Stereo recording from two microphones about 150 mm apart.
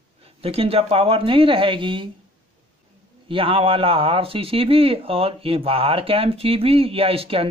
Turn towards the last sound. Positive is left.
turn(degrees=-40)  # may be behind; listen again after turning